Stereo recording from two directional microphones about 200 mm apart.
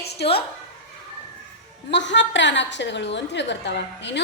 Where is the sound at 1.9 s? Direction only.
65° left (ahead or behind).